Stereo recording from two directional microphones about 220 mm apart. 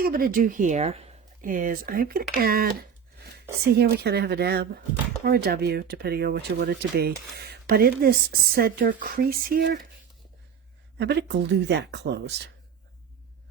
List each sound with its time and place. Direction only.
0.0 s speech: 40° right (ahead or behind)
10.9 s speech: 50° right (ahead or behind)